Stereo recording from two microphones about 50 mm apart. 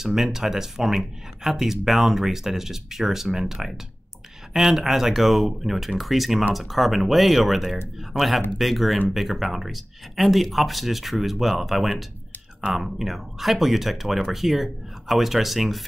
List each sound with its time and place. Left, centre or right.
0.0 s speech: centre